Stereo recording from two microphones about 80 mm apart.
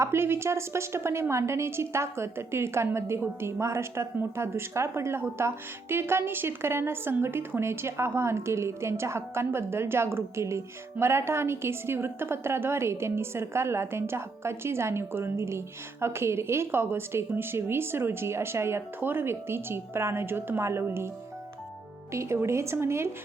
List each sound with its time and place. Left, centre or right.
0.0 s a woman's voice: right
22.1 s a woman's voice: right